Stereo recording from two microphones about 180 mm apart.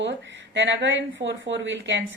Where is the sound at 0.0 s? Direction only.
80° right.